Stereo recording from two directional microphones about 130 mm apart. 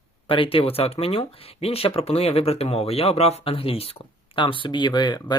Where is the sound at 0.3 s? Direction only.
45° left (ahead or behind).